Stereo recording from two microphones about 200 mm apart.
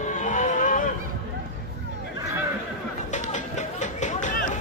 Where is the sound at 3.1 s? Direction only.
40° left (ahead or behind).